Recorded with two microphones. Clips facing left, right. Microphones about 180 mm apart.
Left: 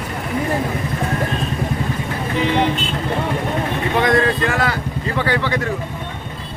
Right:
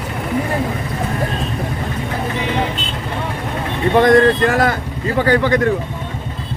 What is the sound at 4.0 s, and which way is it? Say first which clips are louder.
Speech: right 6 dB; 45° right (ahead or behind).